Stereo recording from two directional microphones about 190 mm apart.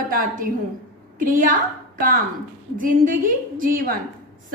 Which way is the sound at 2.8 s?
45° right (ahead or behind).